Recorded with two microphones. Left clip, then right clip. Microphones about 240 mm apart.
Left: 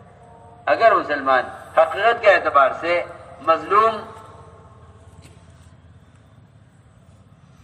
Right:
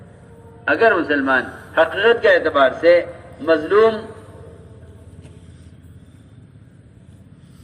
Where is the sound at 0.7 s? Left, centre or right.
Left.